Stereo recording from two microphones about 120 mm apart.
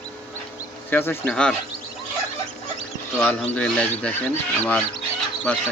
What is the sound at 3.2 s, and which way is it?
Speech, 10° left (ahead or behind).